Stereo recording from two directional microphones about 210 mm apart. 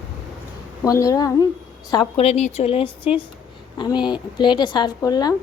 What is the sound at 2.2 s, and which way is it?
Speech, 35° left (ahead or behind).